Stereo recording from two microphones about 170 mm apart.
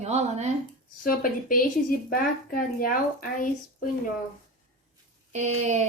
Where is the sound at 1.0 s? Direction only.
55° left (ahead or behind).